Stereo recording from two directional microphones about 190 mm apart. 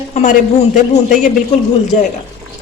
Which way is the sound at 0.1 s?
40° left (ahead or behind).